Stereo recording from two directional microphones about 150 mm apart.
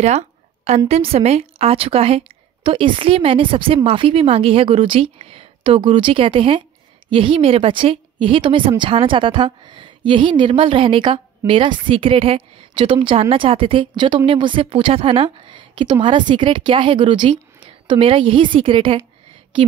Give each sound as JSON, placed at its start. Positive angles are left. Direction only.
{"t": 0.7, "sound": "a woman's voice", "side_deg": -45}